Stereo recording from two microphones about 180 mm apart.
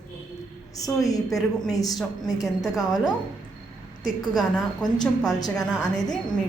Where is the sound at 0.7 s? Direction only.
20° left (ahead or behind).